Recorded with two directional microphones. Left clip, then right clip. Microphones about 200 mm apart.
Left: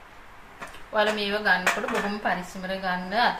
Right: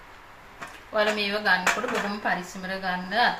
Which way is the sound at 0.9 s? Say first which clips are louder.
Even; 5° left (ahead or behind).